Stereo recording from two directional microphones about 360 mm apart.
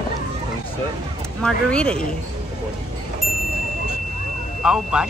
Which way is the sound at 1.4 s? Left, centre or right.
Centre.